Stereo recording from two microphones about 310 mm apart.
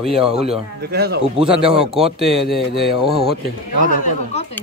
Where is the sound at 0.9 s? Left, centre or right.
Right.